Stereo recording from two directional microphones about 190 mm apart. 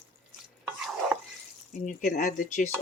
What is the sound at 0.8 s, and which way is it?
Stir, centre (ahead or behind).